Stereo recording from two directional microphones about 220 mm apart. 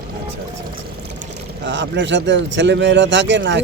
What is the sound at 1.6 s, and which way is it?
Speech, 55° right (ahead or behind).